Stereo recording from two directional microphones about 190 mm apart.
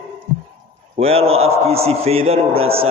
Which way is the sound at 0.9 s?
30° right (ahead or behind).